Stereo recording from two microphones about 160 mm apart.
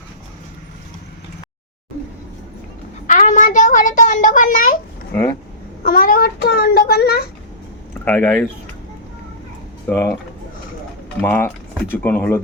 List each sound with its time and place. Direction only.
3.1 s a child's voice: 50° left (ahead or behind)
5.8 s a child's voice: 65° left (ahead or behind); by 7.3 s 85° left
8.0 s speech: 15° left (ahead or behind)
9.9 s speech: 10° left (ahead or behind)
11.2 s speech: 15° left (ahead or behind)